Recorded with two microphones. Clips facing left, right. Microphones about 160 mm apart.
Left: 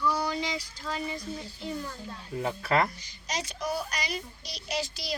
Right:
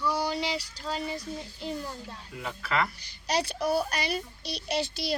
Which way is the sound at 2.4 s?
40° left (ahead or behind).